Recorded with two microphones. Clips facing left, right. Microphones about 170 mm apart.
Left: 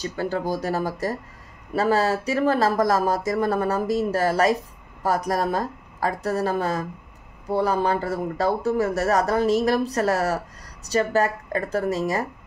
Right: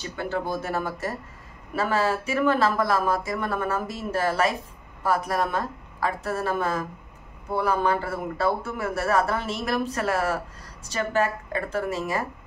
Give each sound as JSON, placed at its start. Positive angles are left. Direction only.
{"t": 0.0, "sound": "a man's voice", "side_deg": 40}